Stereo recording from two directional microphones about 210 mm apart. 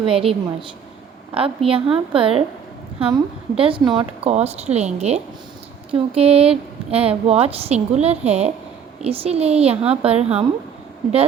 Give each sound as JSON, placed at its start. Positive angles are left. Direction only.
{"t": 0.0, "sound": "a woman's voice", "side_deg": -25}